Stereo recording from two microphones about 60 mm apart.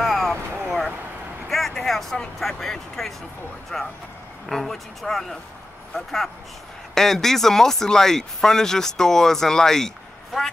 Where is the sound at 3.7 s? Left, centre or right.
Centre.